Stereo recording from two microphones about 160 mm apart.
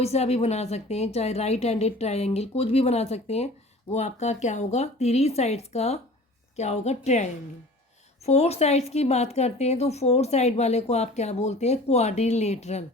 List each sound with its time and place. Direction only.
0.0 s a woman's voice: 40° left (ahead or behind)